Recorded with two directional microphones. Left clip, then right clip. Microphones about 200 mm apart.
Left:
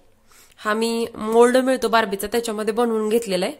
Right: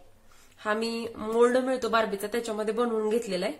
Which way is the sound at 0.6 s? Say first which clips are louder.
Left 8 dB; 55° left (ahead or behind).